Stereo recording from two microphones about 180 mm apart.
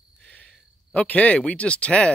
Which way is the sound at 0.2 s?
5° left (ahead or behind).